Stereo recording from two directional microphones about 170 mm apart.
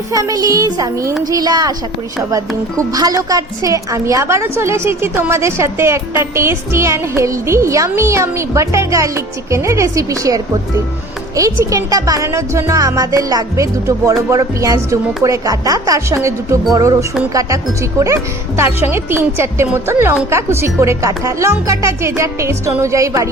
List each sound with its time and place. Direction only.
0.1 s speech: 20° right (ahead or behind)
2.7 s a woman's voice: 20° right (ahead or behind)